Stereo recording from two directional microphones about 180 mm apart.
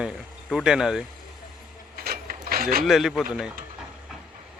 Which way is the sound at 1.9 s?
55° right (ahead or behind).